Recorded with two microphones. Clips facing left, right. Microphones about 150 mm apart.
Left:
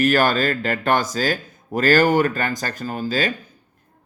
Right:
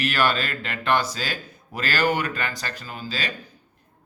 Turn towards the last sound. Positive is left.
turn(degrees=45)  # may be behind; listen again after turning